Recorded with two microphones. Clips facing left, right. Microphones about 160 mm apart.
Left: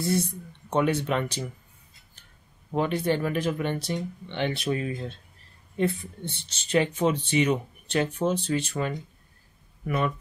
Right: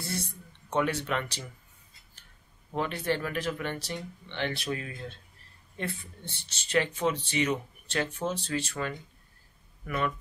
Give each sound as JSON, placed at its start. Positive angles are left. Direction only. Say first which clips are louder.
{"t": 0.0, "sound": "speech", "louder": "left 10 dB", "side_deg": 20}
{"t": 2.7, "sound": "speech", "louder": "left 5 dB", "side_deg": 20}